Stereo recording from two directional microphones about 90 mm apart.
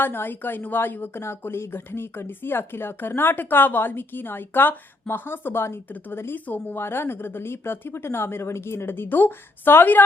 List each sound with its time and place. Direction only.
0.0 s speech: 20° left (ahead or behind)